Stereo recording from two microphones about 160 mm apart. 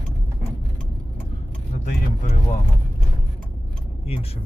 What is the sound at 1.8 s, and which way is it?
Vehicle, 50° left (ahead or behind).